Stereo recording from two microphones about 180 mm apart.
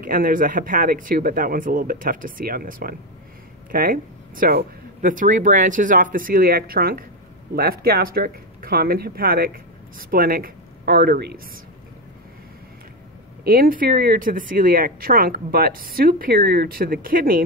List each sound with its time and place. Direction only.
0.0 s speech: 50° right (ahead or behind)
13.4 s speech: 55° right (ahead or behind)